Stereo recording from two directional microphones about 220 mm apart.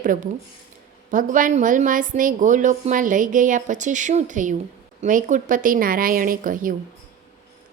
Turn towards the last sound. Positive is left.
turn(degrees=-40)  # may be behind; listen again after turning